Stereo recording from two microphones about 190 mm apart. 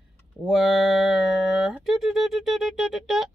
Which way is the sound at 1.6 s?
Centre (ahead or behind).